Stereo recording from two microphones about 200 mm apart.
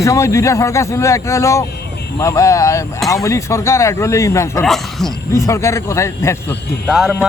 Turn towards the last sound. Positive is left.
turn(degrees=0)  # may be behind; listen again after turning